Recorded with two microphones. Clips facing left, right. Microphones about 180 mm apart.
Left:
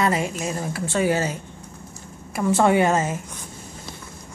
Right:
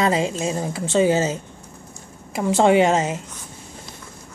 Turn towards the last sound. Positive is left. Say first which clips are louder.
# right 3 dB
turn(degrees=-20)  # may be behind; listen again after turning